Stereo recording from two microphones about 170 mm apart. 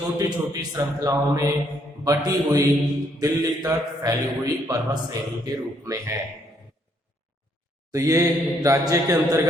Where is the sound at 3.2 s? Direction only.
20° right (ahead or behind).